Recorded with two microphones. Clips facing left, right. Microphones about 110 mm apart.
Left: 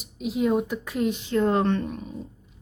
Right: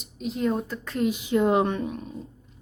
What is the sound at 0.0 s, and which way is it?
Speech, 5° left (ahead or behind).